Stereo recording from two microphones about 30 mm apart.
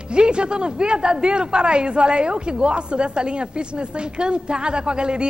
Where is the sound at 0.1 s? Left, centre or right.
Right.